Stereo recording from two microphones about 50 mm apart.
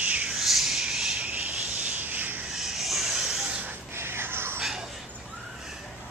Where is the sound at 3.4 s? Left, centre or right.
Right.